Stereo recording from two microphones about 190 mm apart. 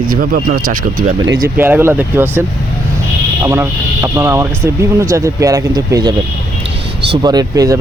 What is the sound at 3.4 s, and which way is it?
Speech, 15° right (ahead or behind).